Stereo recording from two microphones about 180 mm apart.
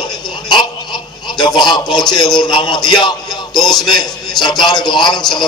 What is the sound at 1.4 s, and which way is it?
A man's voice, 25° left (ahead or behind).